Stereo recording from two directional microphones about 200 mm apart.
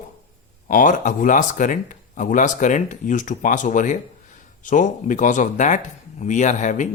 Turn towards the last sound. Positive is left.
turn(degrees=35)  # may be behind; listen again after turning